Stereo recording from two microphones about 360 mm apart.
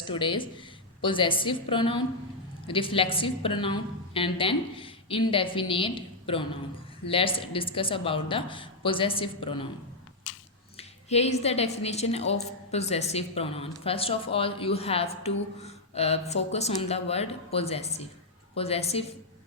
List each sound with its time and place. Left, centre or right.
0.0 s a woman's voice: centre
10.8 s a woman's voice: centre